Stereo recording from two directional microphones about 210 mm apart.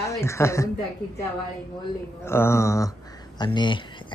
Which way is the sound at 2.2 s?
10° left (ahead or behind).